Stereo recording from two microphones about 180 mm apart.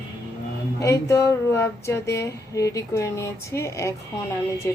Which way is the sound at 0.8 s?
15° left (ahead or behind).